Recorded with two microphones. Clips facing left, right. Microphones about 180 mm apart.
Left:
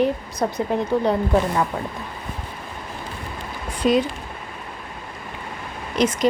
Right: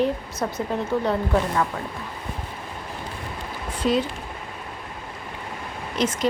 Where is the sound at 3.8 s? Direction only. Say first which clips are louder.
Left 4 dB; 15° left (ahead or behind).